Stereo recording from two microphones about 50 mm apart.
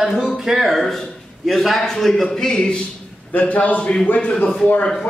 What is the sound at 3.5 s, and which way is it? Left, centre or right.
Speech, left.